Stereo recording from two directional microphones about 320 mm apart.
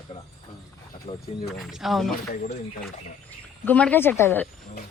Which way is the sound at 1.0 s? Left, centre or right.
Left.